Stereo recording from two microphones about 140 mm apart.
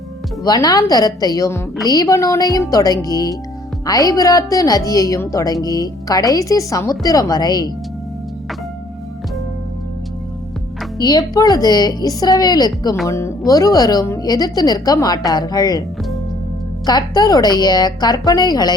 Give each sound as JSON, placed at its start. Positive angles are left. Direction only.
{"t": 0.4, "sound": "a woman's voice", "side_deg": 30}
{"t": 10.9, "sound": "a woman's voice", "side_deg": 25}
{"t": 16.8, "sound": "a woman's voice", "side_deg": 30}